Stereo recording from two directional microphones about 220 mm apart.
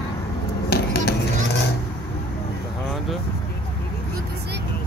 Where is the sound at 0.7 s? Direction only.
45° left (ahead or behind).